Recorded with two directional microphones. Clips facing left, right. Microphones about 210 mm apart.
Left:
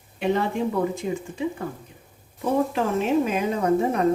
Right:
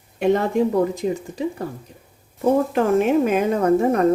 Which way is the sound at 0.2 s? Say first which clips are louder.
Right 5 dB; 40° right (ahead or behind).